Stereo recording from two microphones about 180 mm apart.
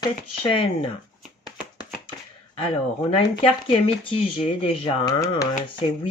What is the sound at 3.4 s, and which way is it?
Speech, 30° left (ahead or behind).